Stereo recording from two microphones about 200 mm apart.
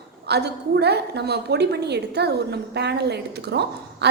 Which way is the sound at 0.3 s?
55° right (ahead or behind).